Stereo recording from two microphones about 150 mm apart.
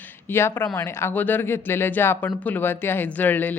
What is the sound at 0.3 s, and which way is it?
Speech, 15° left (ahead or behind).